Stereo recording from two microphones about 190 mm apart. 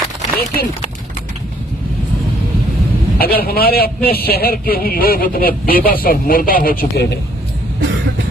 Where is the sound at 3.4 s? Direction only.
55° left (ahead or behind).